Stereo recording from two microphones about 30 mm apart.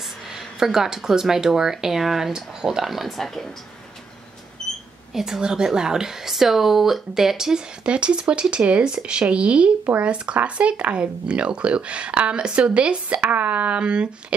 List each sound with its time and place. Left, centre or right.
0.6 s speech: centre
2.3 s speech: centre
3.1 s speech: centre
5.1 s a woman's voice: centre
5.4 s speech: right
7.8 s speech: right
8.8 s speech: right
13.4 s speech: right
13.7 s speech: right